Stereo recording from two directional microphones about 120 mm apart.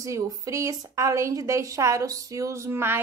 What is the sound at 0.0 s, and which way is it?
Speech, 25° right (ahead or behind).